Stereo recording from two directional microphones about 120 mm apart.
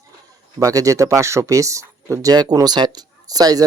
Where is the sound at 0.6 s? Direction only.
30° right (ahead or behind).